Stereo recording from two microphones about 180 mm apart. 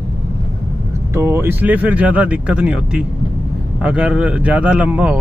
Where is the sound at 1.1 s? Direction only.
15° right (ahead or behind).